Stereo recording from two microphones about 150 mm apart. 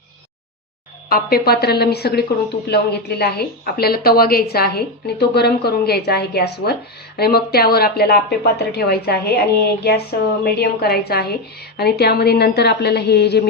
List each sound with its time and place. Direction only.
1.1 s speech: 90° left